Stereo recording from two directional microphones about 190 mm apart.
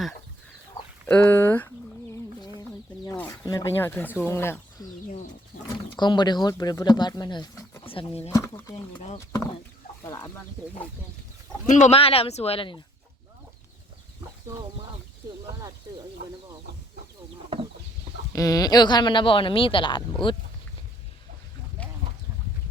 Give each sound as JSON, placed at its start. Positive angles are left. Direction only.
{"t": 1.0, "sound": "speech", "side_deg": 10}
{"t": 2.6, "sound": "a sound", "side_deg": 20}
{"t": 3.4, "sound": "speech", "side_deg": 20}
{"t": 5.0, "sound": "speech", "side_deg": 40}
{"t": 5.6, "sound": "speech", "side_deg": 25}
{"t": 8.3, "sound": "speech", "side_deg": 15}
{"t": 11.7, "sound": "speech", "side_deg": 35}
{"t": 14.4, "sound": "speech", "side_deg": -25}
{"t": 17.5, "sound": "chicken", "side_deg": -30}
{"t": 18.3, "sound": "speech", "side_deg": 20}
{"t": 21.8, "sound": "a sound", "side_deg": 5}